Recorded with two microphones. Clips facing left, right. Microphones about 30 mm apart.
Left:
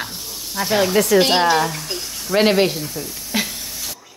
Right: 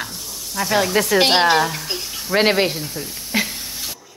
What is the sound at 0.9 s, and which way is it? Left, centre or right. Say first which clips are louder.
Speech: left 1 dB; right.